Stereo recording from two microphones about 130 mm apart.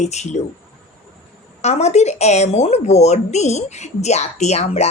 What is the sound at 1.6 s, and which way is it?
Speech, 60° left (ahead or behind).